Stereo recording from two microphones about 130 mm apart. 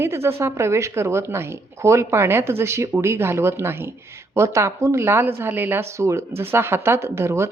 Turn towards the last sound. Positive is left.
turn(degrees=-20)  # may be behind; listen again after turning